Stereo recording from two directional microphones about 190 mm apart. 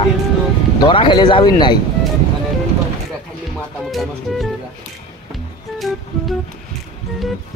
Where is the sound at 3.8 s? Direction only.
Centre (ahead or behind).